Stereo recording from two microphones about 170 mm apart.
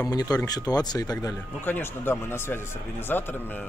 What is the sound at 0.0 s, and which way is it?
Speech, 20° left (ahead or behind).